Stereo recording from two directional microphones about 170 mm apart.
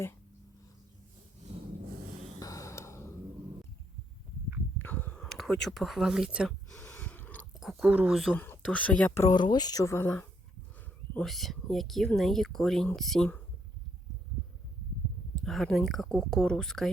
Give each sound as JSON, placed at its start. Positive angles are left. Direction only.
{"t": 2.4, "sound": "a sound", "side_deg": 20}
{"t": 4.8, "sound": "a sound", "side_deg": 10}
{"t": 5.6, "sound": "speech", "side_deg": 0}
{"t": 6.8, "sound": "gasp", "side_deg": 10}
{"t": 7.6, "sound": "speech", "side_deg": 0}
{"t": 15.4, "sound": "speech", "side_deg": 0}